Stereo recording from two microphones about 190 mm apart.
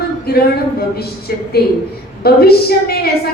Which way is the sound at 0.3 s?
55° left (ahead or behind).